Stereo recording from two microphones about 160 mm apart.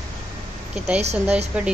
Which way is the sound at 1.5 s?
5° right (ahead or behind).